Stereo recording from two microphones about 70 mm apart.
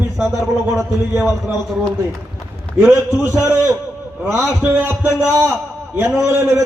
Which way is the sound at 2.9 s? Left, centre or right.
Right.